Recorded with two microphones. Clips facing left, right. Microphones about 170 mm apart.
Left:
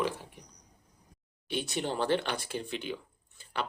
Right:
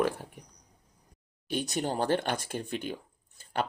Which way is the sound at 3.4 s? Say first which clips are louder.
Right 4 dB; 45° right (ahead or behind).